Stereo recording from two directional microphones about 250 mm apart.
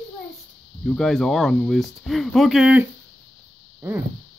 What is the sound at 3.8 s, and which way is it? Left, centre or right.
Speech, centre.